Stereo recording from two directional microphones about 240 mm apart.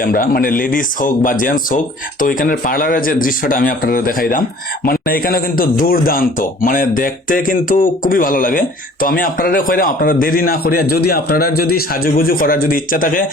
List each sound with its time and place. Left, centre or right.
0.0 s speech: left